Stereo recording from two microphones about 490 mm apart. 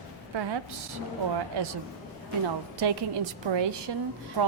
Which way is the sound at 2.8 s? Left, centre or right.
Right.